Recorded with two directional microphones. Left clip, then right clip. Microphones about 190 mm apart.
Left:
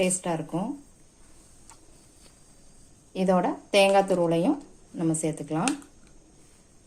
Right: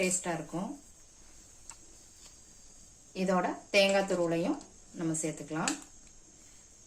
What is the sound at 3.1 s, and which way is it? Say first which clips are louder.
A woman's voice: left 6 dB; 40° left (ahead or behind).